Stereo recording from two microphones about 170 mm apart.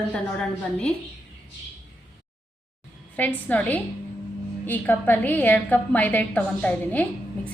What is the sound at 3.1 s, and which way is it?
A woman's voice, 10° left (ahead or behind).